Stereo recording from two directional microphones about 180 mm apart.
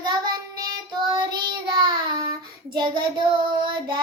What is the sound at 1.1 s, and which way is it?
Child singing, 25° right (ahead or behind).